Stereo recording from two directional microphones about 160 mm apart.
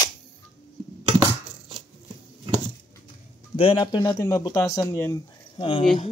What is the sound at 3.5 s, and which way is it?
Speech, 35° left (ahead or behind).